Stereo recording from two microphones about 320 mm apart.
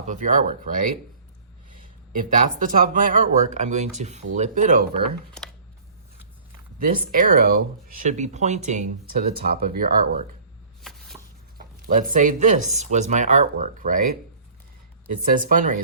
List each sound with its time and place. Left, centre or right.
0.0 s speech: right
2.1 s speech: right
6.7 s speech: right
11.1 s a sound: centre
11.5 s speech: right
15.3 s speech: right